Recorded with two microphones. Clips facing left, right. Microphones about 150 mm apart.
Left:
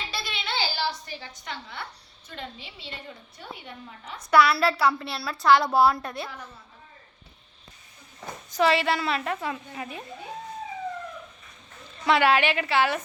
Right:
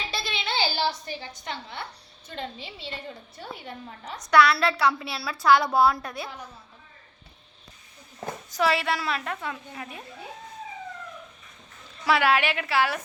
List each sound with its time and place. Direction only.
0.1 s a sound: 25° right (ahead or behind)
2.3 s a woman's voice: 30° right (ahead or behind)
4.3 s a woman's voice: 5° left (ahead or behind)
8.4 s a woman's voice: centre (ahead or behind)
12.0 s a woman's voice: centre (ahead or behind)